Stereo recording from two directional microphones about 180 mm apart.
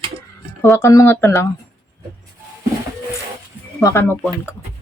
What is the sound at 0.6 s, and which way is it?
Speech, 15° left (ahead or behind).